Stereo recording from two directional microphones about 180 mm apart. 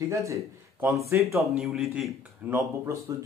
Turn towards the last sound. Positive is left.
turn(degrees=-15)  # may be behind; listen again after turning